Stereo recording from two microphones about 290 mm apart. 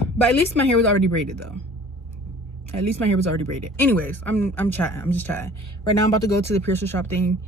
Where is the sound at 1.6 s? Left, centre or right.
Centre.